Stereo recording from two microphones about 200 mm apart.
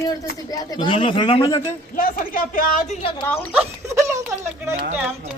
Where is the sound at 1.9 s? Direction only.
45° left (ahead or behind).